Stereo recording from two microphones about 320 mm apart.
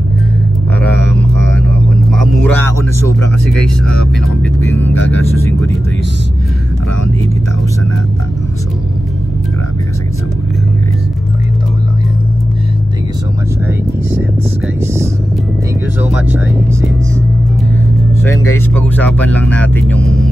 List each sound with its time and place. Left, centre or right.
0.9 s a sound: left
1.7 s music: centre
3.4 s speech: centre
4.7 s speech: left
16.0 s speech: centre
18.7 s speech: centre